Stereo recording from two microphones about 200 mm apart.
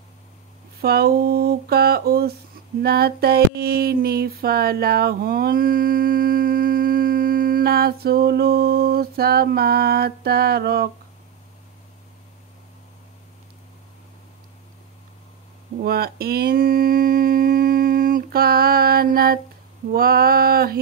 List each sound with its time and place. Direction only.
0.7 s female singing: 50° right (ahead or behind)
15.8 s female singing: 50° right (ahead or behind)